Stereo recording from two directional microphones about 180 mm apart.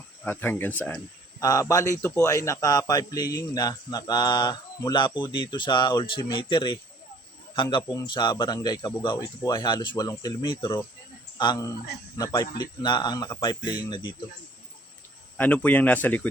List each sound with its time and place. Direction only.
0.3 s speech: 10° left (ahead or behind); by 14.2 s 25° left (ahead or behind)
15.4 s speech: 10° left (ahead or behind)